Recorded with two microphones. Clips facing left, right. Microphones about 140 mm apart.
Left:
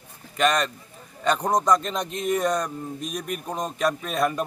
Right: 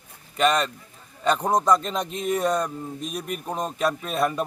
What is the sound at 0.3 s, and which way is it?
A man's voice, centre (ahead or behind).